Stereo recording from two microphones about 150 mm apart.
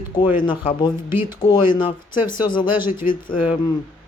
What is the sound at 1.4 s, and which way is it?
Speech, 30° left (ahead or behind).